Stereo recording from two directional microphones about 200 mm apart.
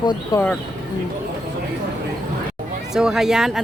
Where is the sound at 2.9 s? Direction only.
Centre (ahead or behind).